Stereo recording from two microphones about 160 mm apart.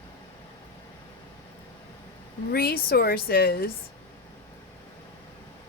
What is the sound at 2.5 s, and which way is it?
Speech, 75° left (ahead or behind).